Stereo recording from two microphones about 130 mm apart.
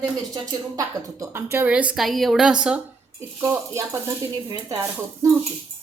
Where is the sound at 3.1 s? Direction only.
20° right (ahead or behind).